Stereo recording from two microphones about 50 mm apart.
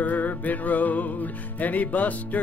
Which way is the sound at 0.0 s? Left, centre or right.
Left.